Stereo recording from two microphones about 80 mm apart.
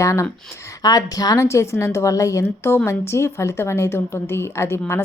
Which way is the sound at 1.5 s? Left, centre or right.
Left.